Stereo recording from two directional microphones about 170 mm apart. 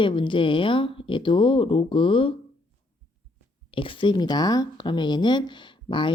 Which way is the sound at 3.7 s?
30° left (ahead or behind).